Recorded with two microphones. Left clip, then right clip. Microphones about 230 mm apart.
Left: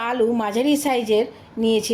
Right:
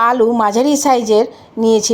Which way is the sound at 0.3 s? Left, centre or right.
Right.